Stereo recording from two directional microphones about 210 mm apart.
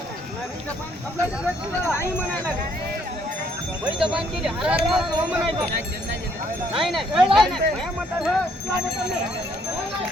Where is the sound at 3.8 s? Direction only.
25° right (ahead or behind).